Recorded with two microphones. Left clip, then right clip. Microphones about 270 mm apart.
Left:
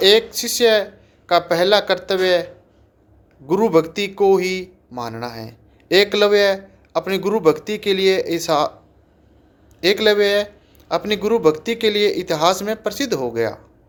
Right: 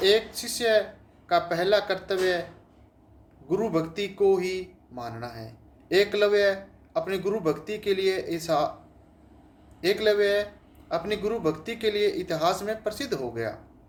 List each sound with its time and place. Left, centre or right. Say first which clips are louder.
0.0 s a man's voice: left 9 dB; left
9.8 s a man's voice: left 7 dB; left